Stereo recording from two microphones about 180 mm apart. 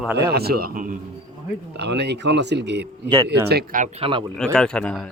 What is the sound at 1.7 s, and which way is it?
A man's voice, 70° right (ahead or behind).